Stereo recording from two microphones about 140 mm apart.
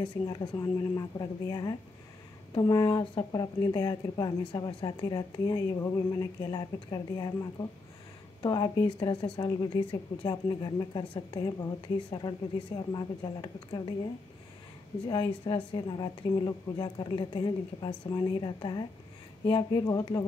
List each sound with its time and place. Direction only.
0.0 s a woman's voice: 30° left (ahead or behind)
8.4 s a woman's voice: 35° left (ahead or behind)
15.0 s a woman's voice: 40° left (ahead or behind)